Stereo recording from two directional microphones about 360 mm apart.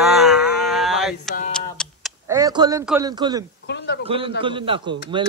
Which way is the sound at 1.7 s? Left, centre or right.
Centre.